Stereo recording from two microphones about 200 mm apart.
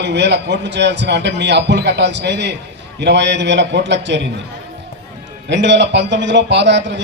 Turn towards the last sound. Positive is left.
turn(degrees=-60)  # may be behind; listen again after turning